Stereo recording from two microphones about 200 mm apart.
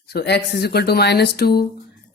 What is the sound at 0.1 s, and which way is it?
Speech, 55° left (ahead or behind).